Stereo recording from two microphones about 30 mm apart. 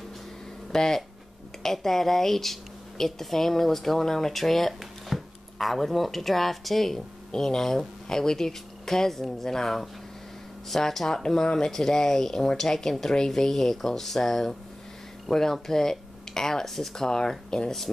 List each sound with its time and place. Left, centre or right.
0.7 s speech: centre